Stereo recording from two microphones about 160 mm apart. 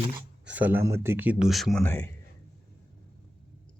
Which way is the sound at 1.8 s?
15° left (ahead or behind).